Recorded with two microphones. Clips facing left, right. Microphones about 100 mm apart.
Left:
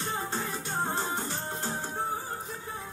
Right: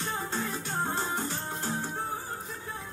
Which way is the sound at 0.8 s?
15° left (ahead or behind).